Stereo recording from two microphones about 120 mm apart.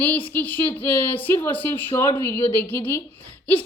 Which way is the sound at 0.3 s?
15° left (ahead or behind).